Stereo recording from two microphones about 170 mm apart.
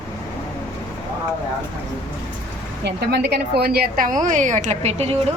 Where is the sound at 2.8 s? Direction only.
90° right.